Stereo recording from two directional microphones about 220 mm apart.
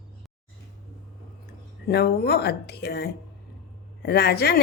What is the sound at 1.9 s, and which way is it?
Speech, 45° left (ahead or behind).